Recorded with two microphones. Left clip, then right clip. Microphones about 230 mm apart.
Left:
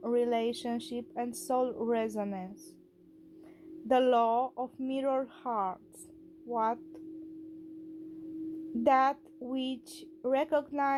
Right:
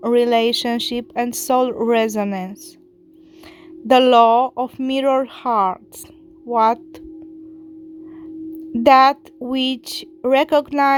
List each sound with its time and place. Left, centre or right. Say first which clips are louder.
0.0 s speech: right 14 dB; right
3.8 s speech: right 15 dB; right
8.8 s speech: right 15 dB; right